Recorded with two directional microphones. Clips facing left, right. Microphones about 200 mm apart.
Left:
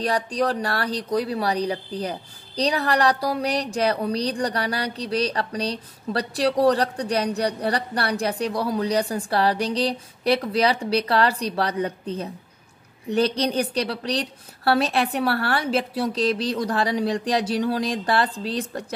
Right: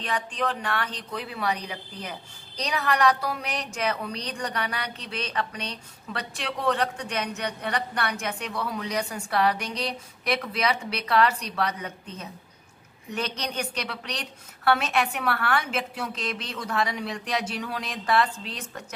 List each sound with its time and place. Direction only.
0.0 s speech: 40° left (ahead or behind)